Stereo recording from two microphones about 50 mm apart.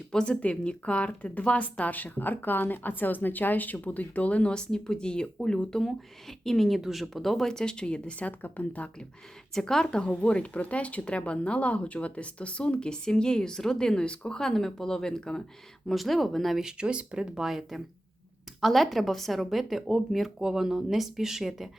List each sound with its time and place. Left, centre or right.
0.1 s speech: centre
4.5 s speech: centre
8.3 s speech: left
9.6 s speech: centre
15.9 s speech: centre
16.6 s speech: centre